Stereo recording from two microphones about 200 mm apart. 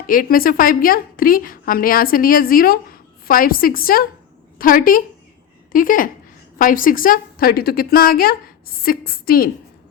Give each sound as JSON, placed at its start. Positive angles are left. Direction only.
{"t": 0.1, "sound": "a woman's voice", "side_deg": 45}